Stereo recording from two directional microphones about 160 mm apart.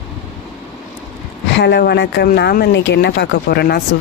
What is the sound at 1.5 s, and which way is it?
Speech, 90° left.